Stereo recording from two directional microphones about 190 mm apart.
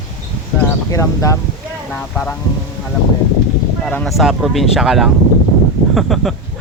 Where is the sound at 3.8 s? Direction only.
10° left (ahead or behind).